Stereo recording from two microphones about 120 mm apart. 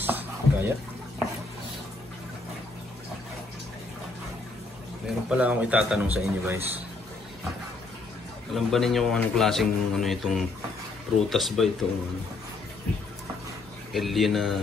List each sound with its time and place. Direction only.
0.0 s a sound: 20° right (ahead or behind)
5.0 s a man's voice: 10° right (ahead or behind)
8.5 s speech: centre (ahead or behind)
13.9 s speech: centre (ahead or behind)